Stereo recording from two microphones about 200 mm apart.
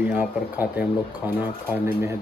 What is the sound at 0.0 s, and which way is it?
Speech, 10° right (ahead or behind).